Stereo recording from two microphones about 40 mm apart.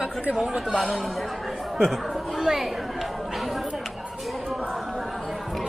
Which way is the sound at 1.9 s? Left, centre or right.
Centre.